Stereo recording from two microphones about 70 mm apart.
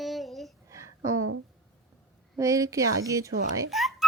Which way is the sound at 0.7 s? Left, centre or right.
Right.